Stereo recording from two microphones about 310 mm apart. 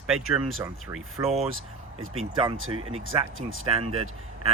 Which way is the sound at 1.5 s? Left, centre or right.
Right.